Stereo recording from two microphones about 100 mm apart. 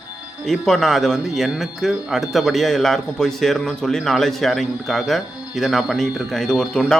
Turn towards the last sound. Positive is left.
turn(degrees=5)  # may be behind; listen again after turning